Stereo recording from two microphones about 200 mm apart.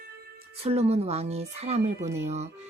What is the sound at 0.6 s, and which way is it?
Music, 30° right (ahead or behind).